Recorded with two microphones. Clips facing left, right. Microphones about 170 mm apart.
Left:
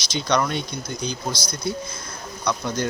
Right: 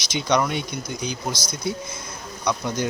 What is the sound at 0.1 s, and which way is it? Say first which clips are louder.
Speech: right 1 dB; 15° right (ahead or behind).